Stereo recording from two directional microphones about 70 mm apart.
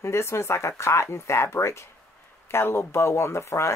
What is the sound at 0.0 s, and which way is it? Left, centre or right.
Speech, left.